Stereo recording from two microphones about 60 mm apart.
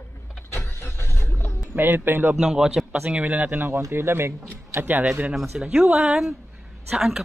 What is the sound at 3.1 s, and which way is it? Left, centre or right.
Speech, right.